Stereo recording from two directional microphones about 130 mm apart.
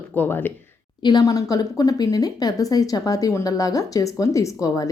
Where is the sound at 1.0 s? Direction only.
30° left (ahead or behind).